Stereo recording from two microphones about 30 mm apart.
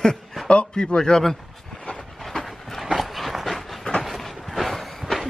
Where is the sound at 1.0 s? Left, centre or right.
Left.